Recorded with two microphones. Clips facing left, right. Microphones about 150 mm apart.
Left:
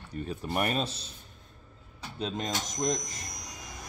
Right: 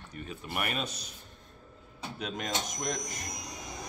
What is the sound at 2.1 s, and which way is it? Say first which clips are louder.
Speech: left 2 dB; 30° left (ahead or behind).